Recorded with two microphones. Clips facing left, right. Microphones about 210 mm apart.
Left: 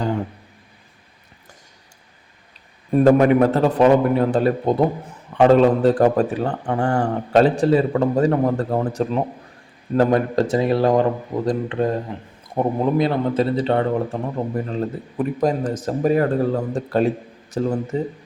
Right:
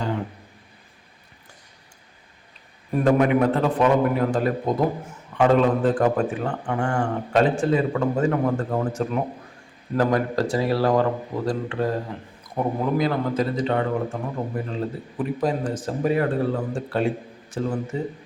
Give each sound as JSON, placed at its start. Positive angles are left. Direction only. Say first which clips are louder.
{"t": 2.9, "sound": "a man's voice", "louder": "left 5 dB", "side_deg": 35}
{"t": 9.9, "sound": "a man's voice", "louder": "left 4 dB", "side_deg": 25}